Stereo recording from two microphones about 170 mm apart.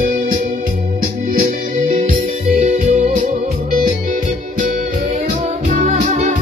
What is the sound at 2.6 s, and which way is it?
Music, 45° right (ahead or behind).